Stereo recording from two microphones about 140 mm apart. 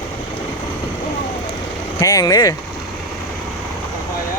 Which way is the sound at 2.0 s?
25° left (ahead or behind).